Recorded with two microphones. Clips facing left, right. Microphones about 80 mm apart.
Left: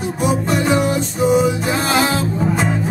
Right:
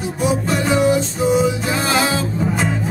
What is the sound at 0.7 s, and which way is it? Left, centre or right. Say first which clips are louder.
Music: right 1 dB; centre.